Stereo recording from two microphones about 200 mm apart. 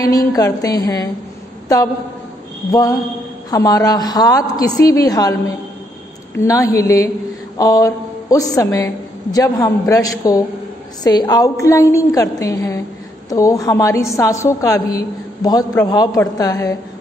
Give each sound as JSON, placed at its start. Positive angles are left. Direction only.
{"t": 0.0, "sound": "a woman's voice", "side_deg": 15}
{"t": 2.7, "sound": "a woman's voice", "side_deg": 15}
{"t": 6.3, "sound": "a woman's voice", "side_deg": 15}